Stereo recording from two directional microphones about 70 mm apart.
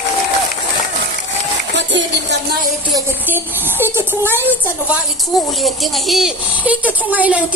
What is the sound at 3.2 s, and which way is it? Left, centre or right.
Music, right.